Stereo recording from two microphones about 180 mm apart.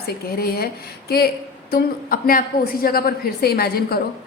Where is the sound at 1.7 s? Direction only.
55° left (ahead or behind).